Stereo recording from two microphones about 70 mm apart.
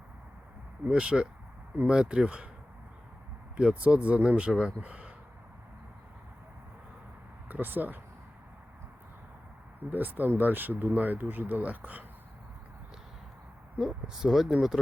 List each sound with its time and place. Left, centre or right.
0.9 s speech: centre
3.6 s speech: centre
7.4 s speech: right
9.9 s speech: right
13.7 s speech: centre